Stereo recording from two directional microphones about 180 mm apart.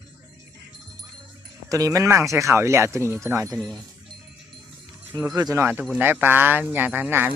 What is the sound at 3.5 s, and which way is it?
Speech, centre (ahead or behind).